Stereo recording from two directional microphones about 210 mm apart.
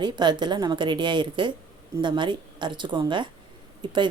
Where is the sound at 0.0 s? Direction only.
20° right (ahead or behind).